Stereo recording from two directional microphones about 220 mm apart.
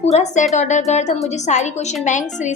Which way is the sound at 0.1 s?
30° left (ahead or behind).